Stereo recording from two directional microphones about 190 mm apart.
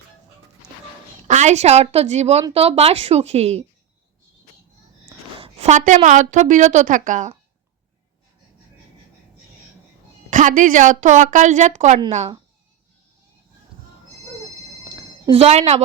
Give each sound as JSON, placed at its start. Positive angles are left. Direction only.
{"t": 1.3, "sound": "a woman's voice", "side_deg": -35}
{"t": 5.4, "sound": "a woman's voice", "side_deg": -35}
{"t": 10.2, "sound": "a woman's voice", "side_deg": -40}
{"t": 15.3, "sound": "a woman's voice", "side_deg": -35}